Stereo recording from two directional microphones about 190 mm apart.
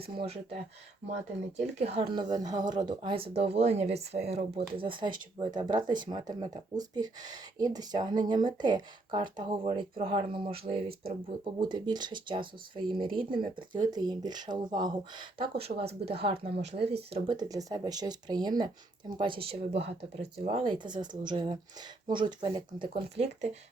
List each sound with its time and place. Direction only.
0.2 s speech: 30° right (ahead or behind)
2.1 s speech: 20° right (ahead or behind)